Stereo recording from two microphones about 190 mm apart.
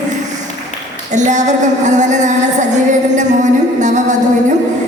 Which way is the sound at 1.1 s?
40° right (ahead or behind).